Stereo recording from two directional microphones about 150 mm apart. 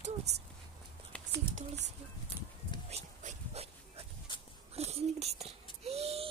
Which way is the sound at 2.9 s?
45° right (ahead or behind).